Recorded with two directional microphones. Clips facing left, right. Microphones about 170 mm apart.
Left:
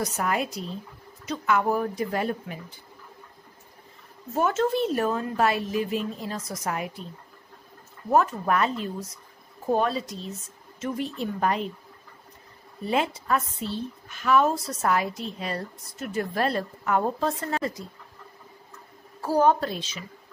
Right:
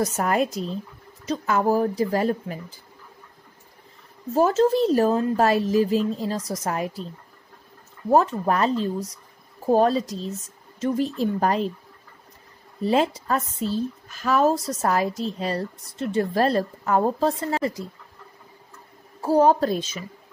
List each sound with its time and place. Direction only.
0.0 s a woman's voice: 40° right (ahead or behind)
4.3 s a woman's voice: 30° right (ahead or behind)
8.1 s a woman's voice: 30° right (ahead or behind)
12.8 s a woman's voice: 35° right (ahead or behind)
19.2 s a woman's voice: 30° right (ahead or behind); by 20.0 s 45° right (ahead or behind)